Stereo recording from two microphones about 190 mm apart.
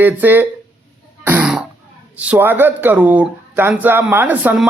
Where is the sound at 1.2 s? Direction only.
10° right (ahead or behind).